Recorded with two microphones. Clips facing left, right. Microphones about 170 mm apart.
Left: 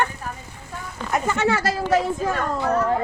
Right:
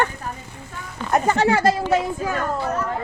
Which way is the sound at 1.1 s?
35° right (ahead or behind).